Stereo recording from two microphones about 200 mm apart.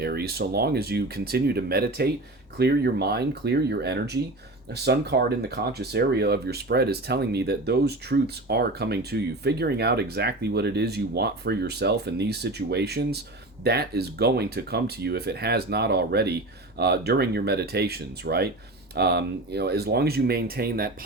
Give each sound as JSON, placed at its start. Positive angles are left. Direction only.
{"t": 0.0, "sound": "speech", "side_deg": -50}